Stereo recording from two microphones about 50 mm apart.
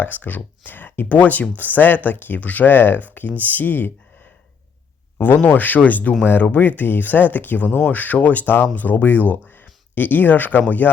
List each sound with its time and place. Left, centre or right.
0.0 s speech: left
1.0 s speech: left
5.1 s speech: left
5.4 s speech: left